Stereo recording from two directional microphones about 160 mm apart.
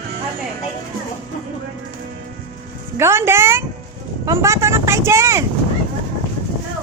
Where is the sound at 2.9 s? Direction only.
15° right (ahead or behind).